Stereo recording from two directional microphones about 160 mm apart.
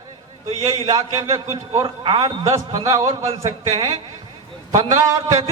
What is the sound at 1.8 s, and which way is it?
Speech, 35° right (ahead or behind).